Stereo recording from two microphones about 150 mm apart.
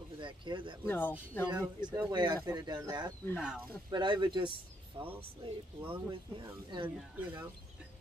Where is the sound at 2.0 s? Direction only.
30° right (ahead or behind).